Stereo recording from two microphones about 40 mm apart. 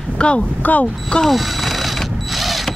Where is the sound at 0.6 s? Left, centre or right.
Left.